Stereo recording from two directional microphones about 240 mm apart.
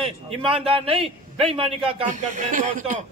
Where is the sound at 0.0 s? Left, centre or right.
Right.